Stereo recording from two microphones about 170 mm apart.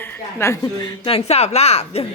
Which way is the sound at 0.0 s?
15° left (ahead or behind).